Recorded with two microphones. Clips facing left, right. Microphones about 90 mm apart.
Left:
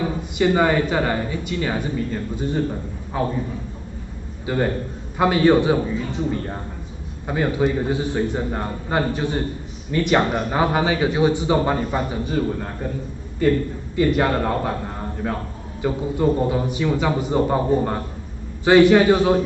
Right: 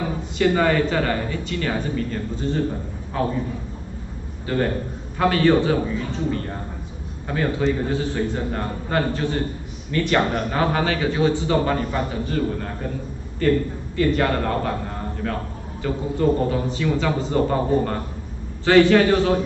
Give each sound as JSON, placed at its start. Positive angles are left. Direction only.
{"t": 0.4, "sound": "a man's voice", "side_deg": 15}
{"t": 4.5, "sound": "a man's voice", "side_deg": 15}